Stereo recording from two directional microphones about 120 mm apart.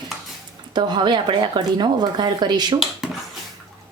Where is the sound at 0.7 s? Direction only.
40° right (ahead or behind).